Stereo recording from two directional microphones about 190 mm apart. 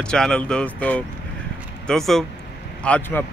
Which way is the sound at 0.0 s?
5° left (ahead or behind).